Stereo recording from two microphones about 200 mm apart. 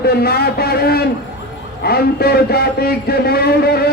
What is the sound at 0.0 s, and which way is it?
Speech, 50° left (ahead or behind).